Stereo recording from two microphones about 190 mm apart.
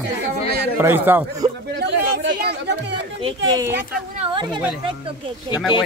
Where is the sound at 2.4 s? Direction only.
65° right (ahead or behind).